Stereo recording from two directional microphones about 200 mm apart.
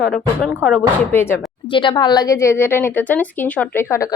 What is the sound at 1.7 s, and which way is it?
A woman's voice, 25° left (ahead or behind).